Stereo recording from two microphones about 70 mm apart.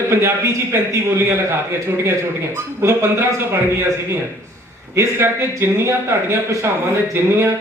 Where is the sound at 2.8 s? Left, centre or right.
Right.